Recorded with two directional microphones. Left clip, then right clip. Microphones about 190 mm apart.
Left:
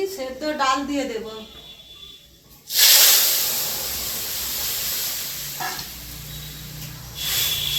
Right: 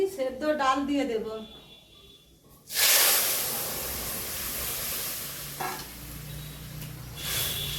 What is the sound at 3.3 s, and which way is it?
Steam, centre (ahead or behind).